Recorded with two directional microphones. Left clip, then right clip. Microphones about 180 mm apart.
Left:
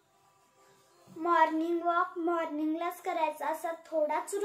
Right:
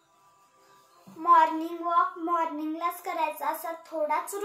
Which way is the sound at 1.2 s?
15° left (ahead or behind).